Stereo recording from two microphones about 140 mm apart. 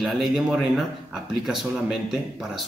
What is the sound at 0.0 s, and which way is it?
Speech, centre (ahead or behind).